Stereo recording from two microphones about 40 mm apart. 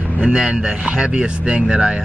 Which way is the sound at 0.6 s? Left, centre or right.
Centre.